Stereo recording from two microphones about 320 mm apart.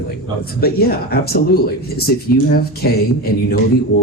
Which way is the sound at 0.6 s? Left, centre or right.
Left.